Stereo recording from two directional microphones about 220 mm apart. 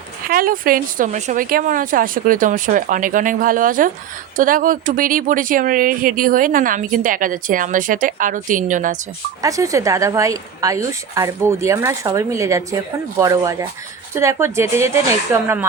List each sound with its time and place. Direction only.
0.3 s speech: 40° right (ahead or behind)
9.4 s a woman's voice: 15° right (ahead or behind)